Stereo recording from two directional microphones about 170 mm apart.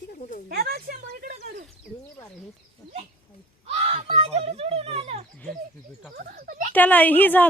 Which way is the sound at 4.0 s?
40° right (ahead or behind).